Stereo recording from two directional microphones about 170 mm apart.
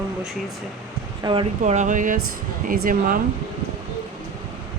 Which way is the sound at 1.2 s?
25° right (ahead or behind).